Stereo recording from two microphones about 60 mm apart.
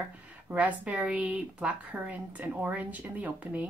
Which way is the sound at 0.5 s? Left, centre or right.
Right.